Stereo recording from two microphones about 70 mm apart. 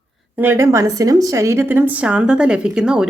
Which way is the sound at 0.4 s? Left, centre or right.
Right.